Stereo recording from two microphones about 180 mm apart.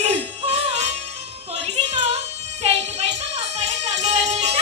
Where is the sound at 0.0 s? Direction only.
35° right (ahead or behind).